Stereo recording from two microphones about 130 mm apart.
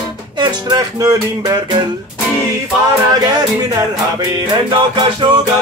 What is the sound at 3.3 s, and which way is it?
Music, 30° right (ahead or behind).